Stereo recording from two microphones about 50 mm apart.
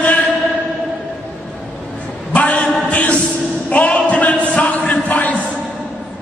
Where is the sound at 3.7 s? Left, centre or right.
Left.